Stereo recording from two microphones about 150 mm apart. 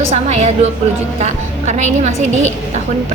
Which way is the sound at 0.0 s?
45° right (ahead or behind).